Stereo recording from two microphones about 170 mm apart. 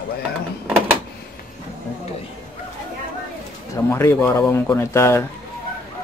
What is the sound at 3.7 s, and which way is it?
Speech, 15° left (ahead or behind).